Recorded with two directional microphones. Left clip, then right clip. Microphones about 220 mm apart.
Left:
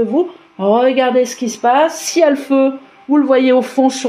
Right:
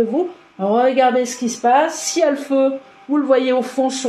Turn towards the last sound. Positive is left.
turn(degrees=35)  # may be behind; listen again after turning